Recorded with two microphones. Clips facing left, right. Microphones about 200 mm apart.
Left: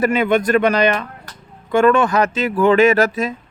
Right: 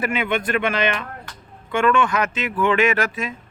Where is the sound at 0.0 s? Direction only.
40° left (ahead or behind).